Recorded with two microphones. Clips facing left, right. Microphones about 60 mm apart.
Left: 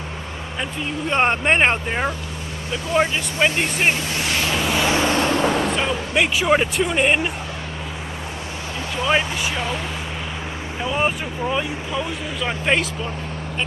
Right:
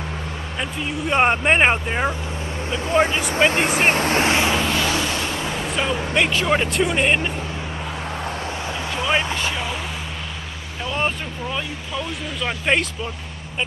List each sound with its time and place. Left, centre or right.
0.6 s speech: centre
3.3 s speech: right
3.8 s speech: right
4.3 s vehicle: right
4.6 s vehicle: centre
4.8 s vehicle: left
5.7 s a sound: centre
6.1 s speech: centre
8.9 s speech: centre
10.8 s speech: centre